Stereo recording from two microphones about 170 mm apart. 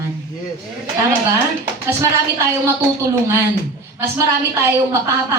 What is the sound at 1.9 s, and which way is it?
A man's voice, 15° right (ahead or behind).